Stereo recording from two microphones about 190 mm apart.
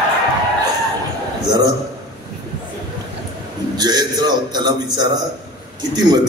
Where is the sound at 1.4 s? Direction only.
20° right (ahead or behind).